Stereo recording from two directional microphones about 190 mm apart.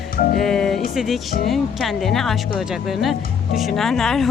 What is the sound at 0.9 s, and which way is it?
Speech, centre (ahead or behind).